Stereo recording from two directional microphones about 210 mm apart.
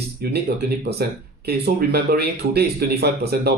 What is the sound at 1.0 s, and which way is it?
Speech, 50° right (ahead or behind).